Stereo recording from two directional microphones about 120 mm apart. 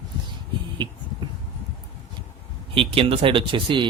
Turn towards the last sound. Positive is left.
turn(degrees=-45)  # may be behind; listen again after turning